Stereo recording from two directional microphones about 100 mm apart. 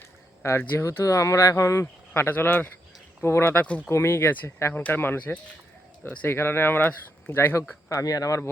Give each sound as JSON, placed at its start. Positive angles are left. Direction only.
{"t": 0.6, "sound": "speech", "side_deg": 25}
{"t": 7.9, "sound": "speech", "side_deg": 35}